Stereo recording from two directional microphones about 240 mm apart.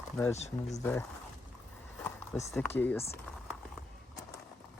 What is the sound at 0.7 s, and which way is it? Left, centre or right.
Speech, centre.